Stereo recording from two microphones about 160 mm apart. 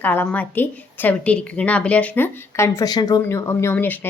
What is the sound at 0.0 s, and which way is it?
A woman's voice, 10° left (ahead or behind).